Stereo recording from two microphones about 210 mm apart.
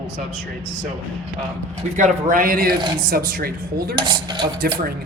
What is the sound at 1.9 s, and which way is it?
A man's voice, 40° right (ahead or behind).